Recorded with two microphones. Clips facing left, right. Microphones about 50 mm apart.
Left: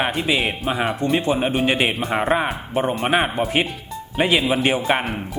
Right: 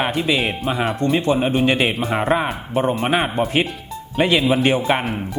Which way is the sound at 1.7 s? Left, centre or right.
Left.